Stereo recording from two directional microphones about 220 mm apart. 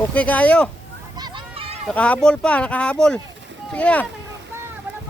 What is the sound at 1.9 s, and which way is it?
Speech, 5° left (ahead or behind).